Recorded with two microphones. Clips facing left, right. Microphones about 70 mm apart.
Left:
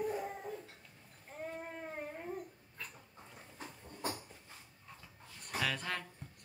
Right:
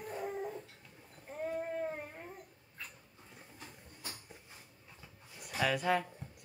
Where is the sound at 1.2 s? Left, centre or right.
Centre.